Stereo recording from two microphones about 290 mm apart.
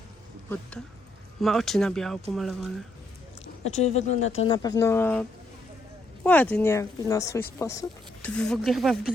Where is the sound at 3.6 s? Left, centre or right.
Left.